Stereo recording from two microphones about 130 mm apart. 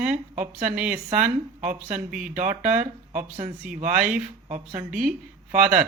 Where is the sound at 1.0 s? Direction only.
75° right (ahead or behind).